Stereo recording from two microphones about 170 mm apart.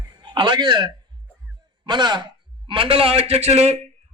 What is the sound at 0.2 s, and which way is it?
A man's voice, 25° right (ahead or behind).